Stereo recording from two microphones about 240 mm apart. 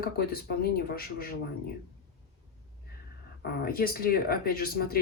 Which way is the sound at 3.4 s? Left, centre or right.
Left.